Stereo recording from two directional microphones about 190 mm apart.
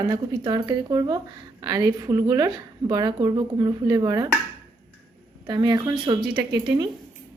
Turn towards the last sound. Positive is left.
turn(degrees=-25)  # may be behind; listen again after turning